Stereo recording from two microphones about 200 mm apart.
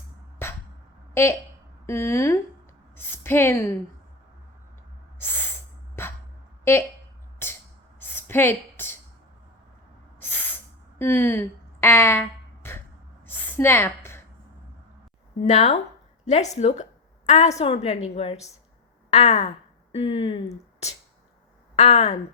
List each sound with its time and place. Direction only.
0.4 s a sound: 10° left (ahead or behind)
1.1 s a woman's voice: 15° left (ahead or behind)
5.2 s spray: 10° left (ahead or behind)
6.7 s speech: 10° left (ahead or behind)
7.4 s music: 10° left (ahead or behind)
7.9 s a sound: 10° left (ahead or behind)
10.2 s hiss: 10° left (ahead or behind)
10.9 s speech: 10° left (ahead or behind)
13.2 s a sound: 10° left (ahead or behind)
15.4 s a woman's voice: 35° left (ahead or behind)
21.8 s a woman's voice: 35° left (ahead or behind)